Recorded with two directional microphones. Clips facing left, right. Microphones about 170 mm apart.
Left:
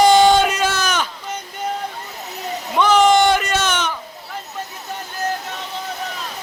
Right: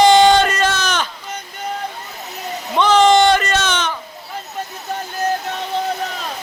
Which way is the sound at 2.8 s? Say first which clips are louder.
Right 1 dB; 10° left (ahead or behind).